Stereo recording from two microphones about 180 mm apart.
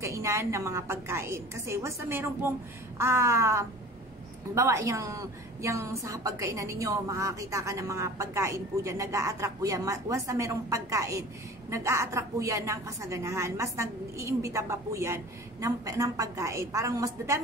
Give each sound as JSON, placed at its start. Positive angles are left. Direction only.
{"t": 0.0, "sound": "a woman's voice", "side_deg": -15}